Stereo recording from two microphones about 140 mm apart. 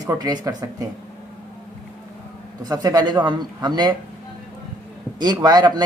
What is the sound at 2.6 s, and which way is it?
Speech, 25° right (ahead or behind).